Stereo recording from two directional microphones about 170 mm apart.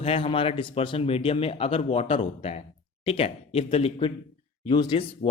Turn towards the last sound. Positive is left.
turn(degrees=30)  # may be behind; listen again after turning